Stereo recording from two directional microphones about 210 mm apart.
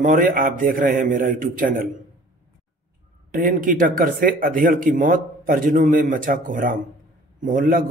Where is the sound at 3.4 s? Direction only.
40° right (ahead or behind).